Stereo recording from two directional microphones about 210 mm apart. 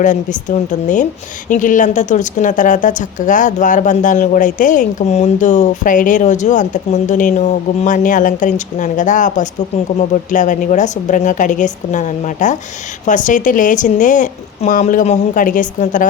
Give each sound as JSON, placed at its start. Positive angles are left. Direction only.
{"t": 0.0, "sound": "a woman's voice", "side_deg": 35}